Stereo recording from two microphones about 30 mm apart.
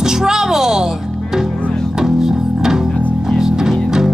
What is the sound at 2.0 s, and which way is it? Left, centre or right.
Music, centre.